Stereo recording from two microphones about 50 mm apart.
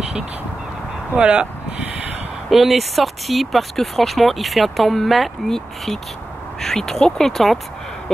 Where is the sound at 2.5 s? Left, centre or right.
Centre.